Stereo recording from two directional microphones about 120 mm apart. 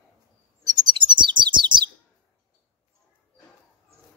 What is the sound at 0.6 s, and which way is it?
Chirp, 35° right (ahead or behind).